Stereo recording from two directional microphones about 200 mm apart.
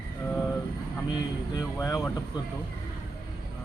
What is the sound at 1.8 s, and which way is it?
Speech, 15° left (ahead or behind).